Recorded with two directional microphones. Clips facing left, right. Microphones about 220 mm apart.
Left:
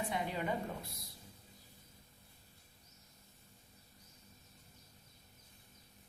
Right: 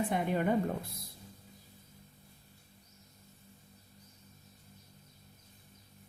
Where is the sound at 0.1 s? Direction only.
50° right (ahead or behind).